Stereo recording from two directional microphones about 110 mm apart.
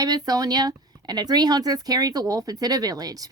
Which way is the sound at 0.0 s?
35° right (ahead or behind).